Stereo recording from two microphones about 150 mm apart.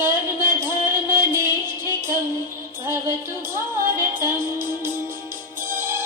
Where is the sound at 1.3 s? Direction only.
15° right (ahead or behind).